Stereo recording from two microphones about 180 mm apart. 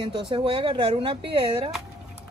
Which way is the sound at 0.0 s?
25° right (ahead or behind).